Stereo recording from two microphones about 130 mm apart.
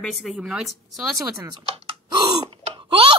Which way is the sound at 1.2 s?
30° right (ahead or behind).